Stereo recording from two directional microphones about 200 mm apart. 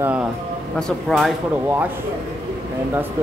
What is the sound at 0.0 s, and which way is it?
Speech, 5° right (ahead or behind).